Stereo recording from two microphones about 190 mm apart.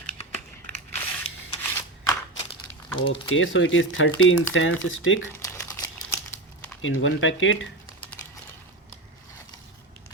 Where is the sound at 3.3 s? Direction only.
85° left.